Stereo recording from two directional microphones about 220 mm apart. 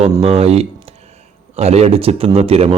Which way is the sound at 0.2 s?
30° right (ahead or behind).